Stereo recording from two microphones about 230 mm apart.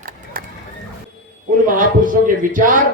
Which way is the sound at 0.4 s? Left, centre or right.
Right.